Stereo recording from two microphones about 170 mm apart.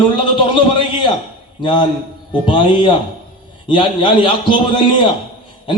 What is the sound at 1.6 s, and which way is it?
A man's voice, 30° left (ahead or behind).